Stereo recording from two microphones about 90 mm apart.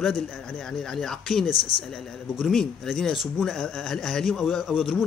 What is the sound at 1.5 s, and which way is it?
Speech, 75° left (ahead or behind).